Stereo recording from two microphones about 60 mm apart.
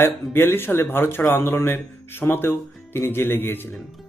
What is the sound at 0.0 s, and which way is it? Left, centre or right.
Speech, left.